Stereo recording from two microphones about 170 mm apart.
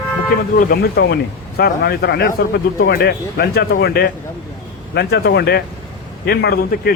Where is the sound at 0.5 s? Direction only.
65° left (ahead or behind).